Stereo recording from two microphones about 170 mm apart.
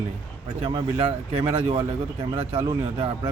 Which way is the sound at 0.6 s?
30° right (ahead or behind).